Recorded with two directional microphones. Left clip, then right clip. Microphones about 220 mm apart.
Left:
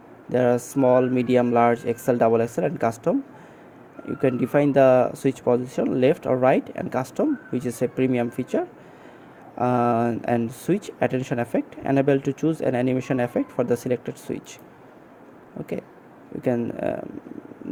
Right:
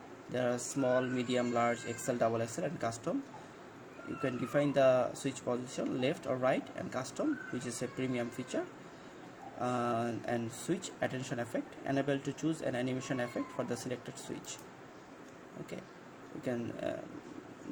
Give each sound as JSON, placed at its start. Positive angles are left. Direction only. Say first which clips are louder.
{"t": 0.3, "sound": "speech", "louder": "left 14 dB", "side_deg": 40}
{"t": 4.2, "sound": "speech", "louder": "left 12 dB", "side_deg": 35}
{"t": 16.4, "sound": "speech", "louder": "left 13 dB", "side_deg": 40}